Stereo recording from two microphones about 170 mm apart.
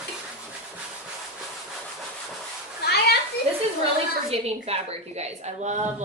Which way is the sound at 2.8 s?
70° left (ahead or behind).